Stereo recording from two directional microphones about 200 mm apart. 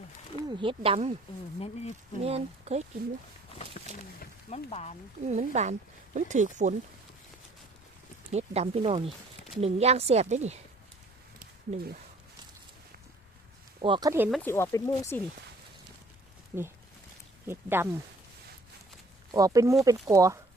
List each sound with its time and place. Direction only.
0.4 s speech: 25° right (ahead or behind)
1.5 s speech: 30° left (ahead or behind)
2.2 s speech: 30° right (ahead or behind)
3.5 s a sound: 30° left (ahead or behind)
4.4 s speech: 30° left (ahead or behind)
5.2 s speech: 35° right (ahead or behind)
8.3 s speech: 35° right (ahead or behind)
11.3 s a sound: 50° right (ahead or behind)
13.8 s speech: 25° right (ahead or behind)
14.4 s speech: 10° left (ahead or behind)
16.5 s speech: 10° right (ahead or behind)
19.3 s speech: 15° right (ahead or behind)